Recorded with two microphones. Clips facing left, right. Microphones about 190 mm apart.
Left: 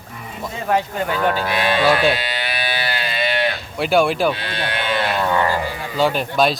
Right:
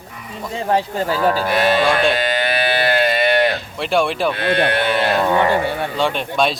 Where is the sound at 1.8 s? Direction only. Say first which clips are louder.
Even; 5° left (ahead or behind).